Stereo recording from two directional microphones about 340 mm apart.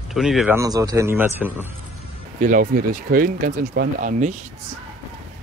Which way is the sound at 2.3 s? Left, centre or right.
Right.